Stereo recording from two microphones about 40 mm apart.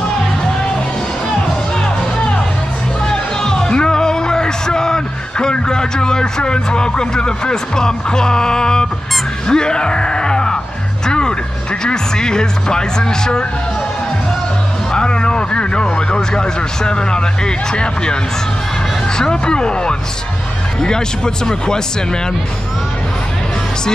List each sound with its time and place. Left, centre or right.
3.1 s music: centre
9.5 s groan: centre
11.1 s speech: centre
14.9 s speech: centre
19.1 s speech: centre